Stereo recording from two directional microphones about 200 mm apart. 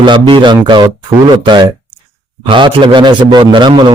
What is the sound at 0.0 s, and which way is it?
A man's voice, 25° right (ahead or behind).